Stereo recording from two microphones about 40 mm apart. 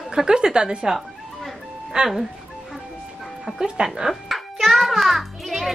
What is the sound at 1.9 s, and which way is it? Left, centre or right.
Speech, right.